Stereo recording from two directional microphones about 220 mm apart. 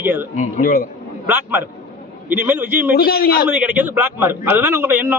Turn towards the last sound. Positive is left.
turn(degrees=-10)  # may be behind; listen again after turning